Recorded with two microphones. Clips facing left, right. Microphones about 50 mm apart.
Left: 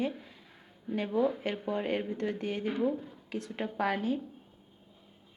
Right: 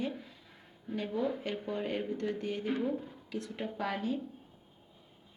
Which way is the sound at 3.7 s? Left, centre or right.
Left.